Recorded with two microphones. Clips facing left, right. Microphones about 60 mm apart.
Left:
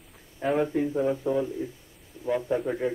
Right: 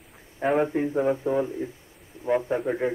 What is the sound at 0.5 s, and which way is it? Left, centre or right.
A man's voice, right.